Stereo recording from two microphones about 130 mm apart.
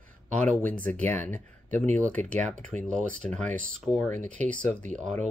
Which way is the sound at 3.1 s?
5° left (ahead or behind).